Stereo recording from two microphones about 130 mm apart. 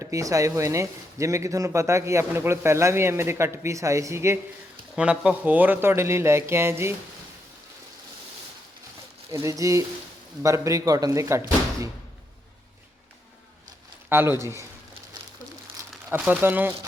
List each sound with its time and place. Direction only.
0.0 s speech: 25° right (ahead or behind)
4.9 s speech: 10° right (ahead or behind)
9.3 s speech: 25° right (ahead or behind)
14.1 s speech: 20° right (ahead or behind)
16.0 s speech: 10° right (ahead or behind)